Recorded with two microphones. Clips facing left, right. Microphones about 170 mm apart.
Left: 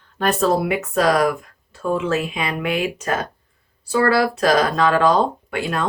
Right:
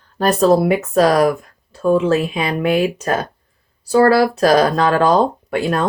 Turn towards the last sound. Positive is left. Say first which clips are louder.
# right 5 dB
turn(degrees=-40)  # may be behind; listen again after turning